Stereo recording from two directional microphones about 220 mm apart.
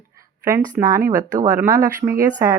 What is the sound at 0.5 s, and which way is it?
Speech, 15° right (ahead or behind).